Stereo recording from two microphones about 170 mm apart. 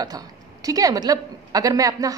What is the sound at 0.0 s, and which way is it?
A woman's voice, 20° right (ahead or behind).